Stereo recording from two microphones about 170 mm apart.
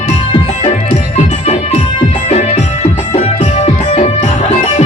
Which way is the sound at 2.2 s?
40° left (ahead or behind).